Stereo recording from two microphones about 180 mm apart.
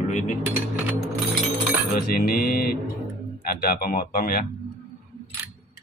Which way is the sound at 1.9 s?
55° left (ahead or behind).